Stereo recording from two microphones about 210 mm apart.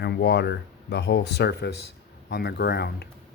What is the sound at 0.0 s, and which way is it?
Speech, 50° left (ahead or behind).